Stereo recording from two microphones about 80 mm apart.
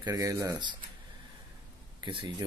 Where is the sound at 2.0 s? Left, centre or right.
Right.